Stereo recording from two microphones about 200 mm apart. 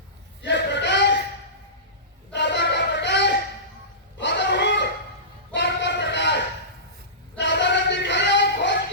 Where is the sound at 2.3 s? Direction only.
60° left (ahead or behind).